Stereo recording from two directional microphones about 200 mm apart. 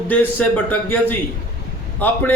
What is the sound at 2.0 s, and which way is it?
Speech, 10° left (ahead or behind).